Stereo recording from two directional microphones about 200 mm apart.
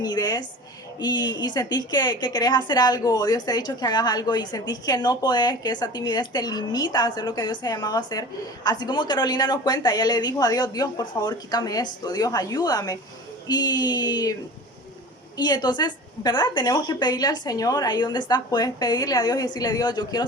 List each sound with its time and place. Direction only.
0.0 s a woman's voice: 20° left (ahead or behind)
15.4 s a woman's voice: 20° left (ahead or behind)